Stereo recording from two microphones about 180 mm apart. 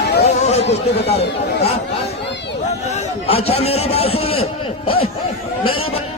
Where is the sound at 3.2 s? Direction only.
35° left (ahead or behind).